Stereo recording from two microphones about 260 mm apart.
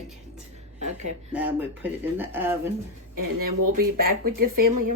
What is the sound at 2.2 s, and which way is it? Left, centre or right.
Speech, centre.